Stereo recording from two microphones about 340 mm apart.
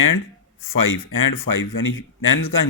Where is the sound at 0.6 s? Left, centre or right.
Left.